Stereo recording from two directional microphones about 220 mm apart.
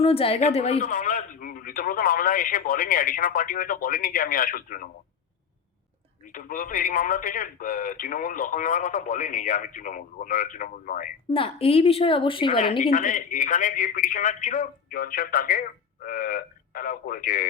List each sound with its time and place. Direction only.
0.0 s speech: 25° left (ahead or behind)
6.2 s speech: 40° left (ahead or behind)
11.3 s a woman's voice: 25° left (ahead or behind)
12.8 s speech: 40° left (ahead or behind)